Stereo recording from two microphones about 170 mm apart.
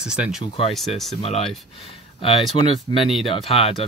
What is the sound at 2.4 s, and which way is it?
Speech, centre (ahead or behind).